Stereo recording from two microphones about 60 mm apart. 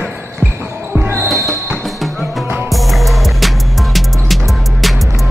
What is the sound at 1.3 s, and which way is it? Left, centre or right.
Music, centre.